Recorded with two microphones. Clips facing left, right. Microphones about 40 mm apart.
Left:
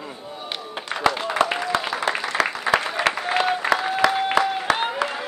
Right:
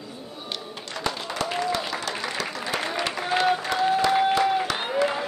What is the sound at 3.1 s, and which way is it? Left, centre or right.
Applause, left.